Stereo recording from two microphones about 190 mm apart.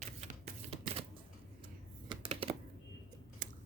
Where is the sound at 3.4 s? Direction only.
45° right (ahead or behind).